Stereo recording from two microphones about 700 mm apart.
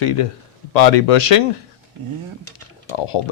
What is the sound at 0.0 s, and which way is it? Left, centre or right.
Speech, left.